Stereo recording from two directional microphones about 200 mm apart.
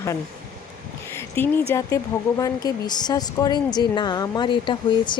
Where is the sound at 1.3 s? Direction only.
10° left (ahead or behind).